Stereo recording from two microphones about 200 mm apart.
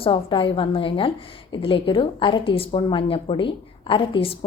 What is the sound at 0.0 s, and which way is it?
Speech, 25° left (ahead or behind).